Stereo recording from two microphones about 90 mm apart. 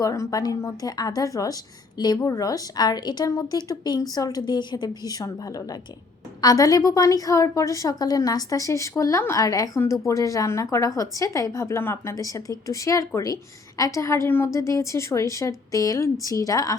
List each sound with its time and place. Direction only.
0.0 s a woman's voice: 40° left (ahead or behind)
2.0 s a woman's voice: 50° left (ahead or behind)
2.2 s a woman's voice: 40° left (ahead or behind)
3.2 s a woman's voice: 40° left (ahead or behind)
12.1 s a woman's voice: 40° left (ahead or behind)